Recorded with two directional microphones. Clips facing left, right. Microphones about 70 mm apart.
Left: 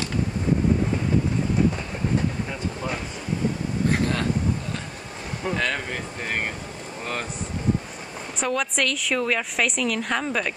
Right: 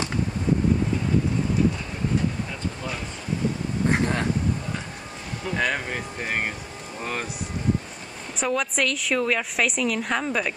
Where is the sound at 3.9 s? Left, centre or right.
Right.